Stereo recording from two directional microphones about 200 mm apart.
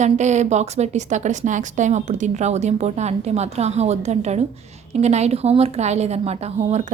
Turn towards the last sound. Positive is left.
turn(degrees=-35)  # may be behind; listen again after turning